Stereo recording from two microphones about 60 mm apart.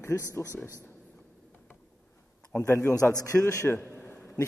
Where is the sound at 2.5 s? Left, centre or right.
Left.